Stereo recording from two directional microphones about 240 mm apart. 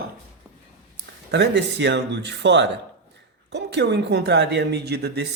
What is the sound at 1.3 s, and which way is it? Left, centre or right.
Speech, right.